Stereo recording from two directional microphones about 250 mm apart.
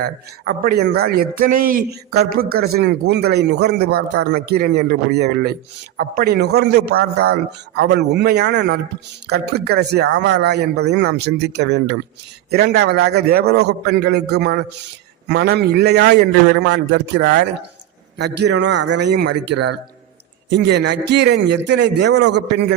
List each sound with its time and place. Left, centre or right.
0.0 s a man's voice: right